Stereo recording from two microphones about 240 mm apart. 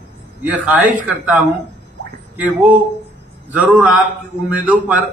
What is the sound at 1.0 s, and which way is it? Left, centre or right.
A man's voice, centre.